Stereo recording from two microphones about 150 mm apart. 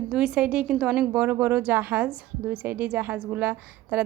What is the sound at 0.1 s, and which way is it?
Speech, 5° right (ahead or behind).